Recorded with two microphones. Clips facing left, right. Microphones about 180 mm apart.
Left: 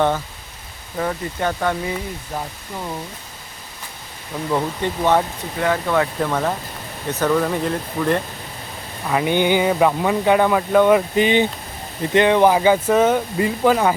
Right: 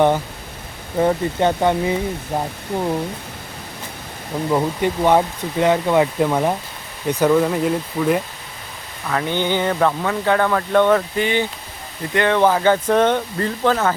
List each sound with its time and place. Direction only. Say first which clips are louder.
0.9 s speech: right 6 dB; 25° right (ahead or behind)
4.5 s speech: right 2 dB; 15° right (ahead or behind)
9.0 s speech: left 3 dB; 15° left (ahead or behind)